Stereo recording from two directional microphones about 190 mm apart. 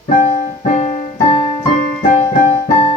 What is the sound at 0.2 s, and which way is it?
Keyboard, 40° left (ahead or behind).